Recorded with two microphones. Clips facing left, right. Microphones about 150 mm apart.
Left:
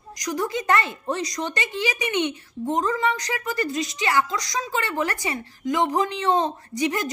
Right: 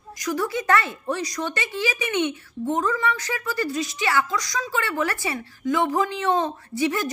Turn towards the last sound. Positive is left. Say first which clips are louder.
# right 1 dB
turn(degrees=15)  # may be behind; listen again after turning